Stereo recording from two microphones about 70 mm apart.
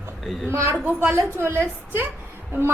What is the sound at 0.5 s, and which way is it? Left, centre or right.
A woman's voice, right.